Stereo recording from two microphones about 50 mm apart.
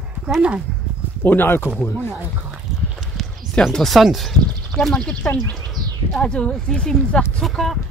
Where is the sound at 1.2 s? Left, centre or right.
Left.